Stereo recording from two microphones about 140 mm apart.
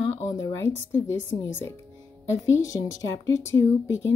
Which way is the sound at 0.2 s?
25° left (ahead or behind).